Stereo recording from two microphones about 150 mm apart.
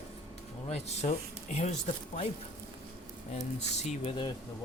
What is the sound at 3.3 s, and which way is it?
Speech, 50° left (ahead or behind).